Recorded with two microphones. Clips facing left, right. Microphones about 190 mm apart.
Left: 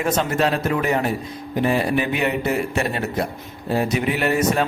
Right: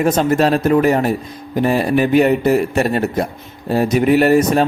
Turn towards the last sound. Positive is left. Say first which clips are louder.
# right 7 dB
turn(degrees=-40)  # may be behind; listen again after turning